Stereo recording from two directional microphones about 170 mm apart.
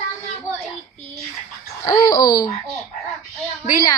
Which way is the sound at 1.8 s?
20° left (ahead or behind).